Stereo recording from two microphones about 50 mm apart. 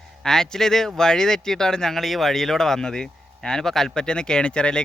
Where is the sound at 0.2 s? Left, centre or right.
Centre.